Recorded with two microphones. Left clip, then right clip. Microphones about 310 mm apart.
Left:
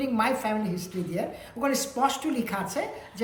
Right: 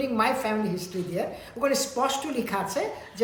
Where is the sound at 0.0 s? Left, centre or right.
Centre.